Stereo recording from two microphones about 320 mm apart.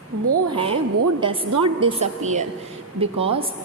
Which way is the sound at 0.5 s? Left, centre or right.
Centre.